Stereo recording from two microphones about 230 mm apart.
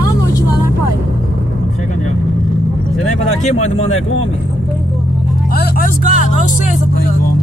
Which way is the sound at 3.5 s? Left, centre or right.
Left.